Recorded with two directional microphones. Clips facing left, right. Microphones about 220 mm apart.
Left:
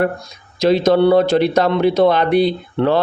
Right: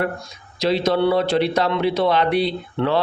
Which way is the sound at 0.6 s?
45° left (ahead or behind).